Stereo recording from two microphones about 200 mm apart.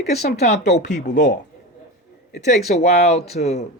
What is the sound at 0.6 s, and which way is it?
Speech, 60° left (ahead or behind).